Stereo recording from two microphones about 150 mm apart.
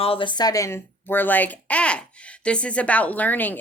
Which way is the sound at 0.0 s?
35° left (ahead or behind).